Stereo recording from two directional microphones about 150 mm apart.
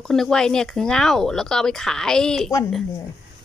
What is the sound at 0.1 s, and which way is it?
Speech, 5° left (ahead or behind).